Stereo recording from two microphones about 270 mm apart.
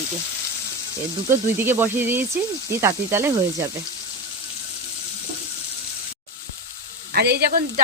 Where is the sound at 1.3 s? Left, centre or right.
Centre.